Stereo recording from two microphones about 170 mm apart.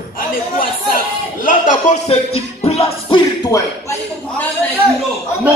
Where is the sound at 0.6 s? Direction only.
55° left (ahead or behind); by 3.2 s 35° left (ahead or behind).